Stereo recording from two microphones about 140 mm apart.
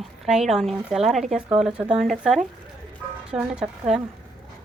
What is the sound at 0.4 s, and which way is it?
Speech, centre (ahead or behind).